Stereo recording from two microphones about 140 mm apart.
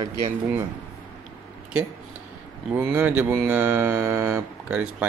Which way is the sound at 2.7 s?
15° right (ahead or behind).